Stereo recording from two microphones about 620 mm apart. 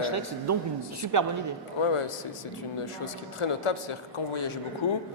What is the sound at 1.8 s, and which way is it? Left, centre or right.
Speech, left.